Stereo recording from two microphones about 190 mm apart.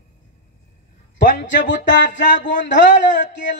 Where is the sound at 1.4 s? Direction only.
70° left (ahead or behind).